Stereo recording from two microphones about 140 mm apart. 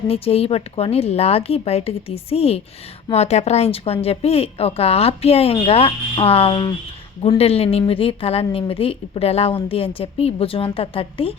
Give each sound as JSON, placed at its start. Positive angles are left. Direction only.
{"t": 0.1, "sound": "speech", "side_deg": 45}